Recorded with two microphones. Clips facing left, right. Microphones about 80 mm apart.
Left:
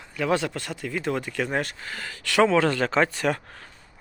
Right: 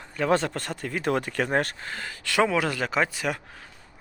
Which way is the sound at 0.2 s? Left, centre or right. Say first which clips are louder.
Right 1 dB; right.